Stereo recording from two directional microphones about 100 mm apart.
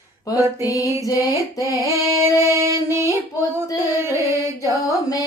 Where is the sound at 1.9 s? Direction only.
30° right (ahead or behind).